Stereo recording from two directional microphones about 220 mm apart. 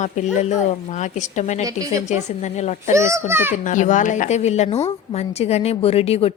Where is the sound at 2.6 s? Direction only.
30° left (ahead or behind).